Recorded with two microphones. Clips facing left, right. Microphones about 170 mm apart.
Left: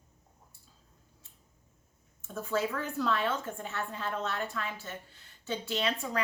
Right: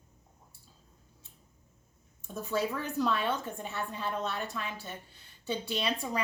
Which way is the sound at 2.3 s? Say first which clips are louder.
Even; 20° right (ahead or behind).